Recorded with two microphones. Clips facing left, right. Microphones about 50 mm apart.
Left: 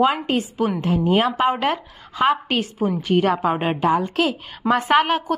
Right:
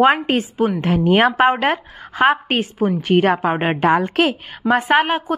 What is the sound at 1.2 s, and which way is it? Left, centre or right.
A woman's voice, right.